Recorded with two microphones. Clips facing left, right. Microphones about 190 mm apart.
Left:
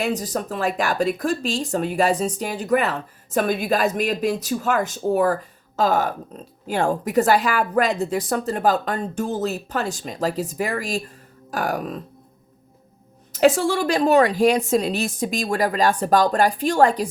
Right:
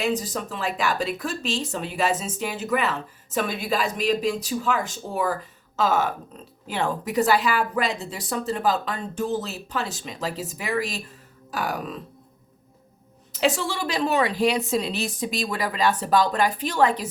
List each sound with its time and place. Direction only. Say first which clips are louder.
0.2 s a woman's voice: left 5 dB; 45° left (ahead or behind); by 4.4 s 60° left (ahead or behind)
4.4 s a woman's voice: left 3 dB; 45° left (ahead or behind)
13.3 s a woman's voice: left 7 dB; 45° left (ahead or behind)